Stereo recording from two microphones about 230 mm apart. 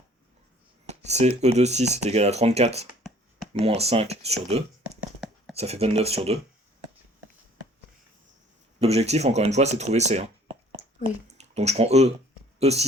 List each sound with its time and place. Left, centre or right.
0.9 s speech: right
4.9 s a sound: centre
5.5 s speech: right
8.8 s speech: right